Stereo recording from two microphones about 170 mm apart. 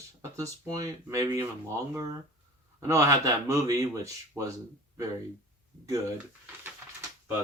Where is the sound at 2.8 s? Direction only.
20° right (ahead or behind).